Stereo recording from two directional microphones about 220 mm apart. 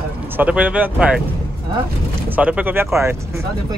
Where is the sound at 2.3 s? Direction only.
5° right (ahead or behind).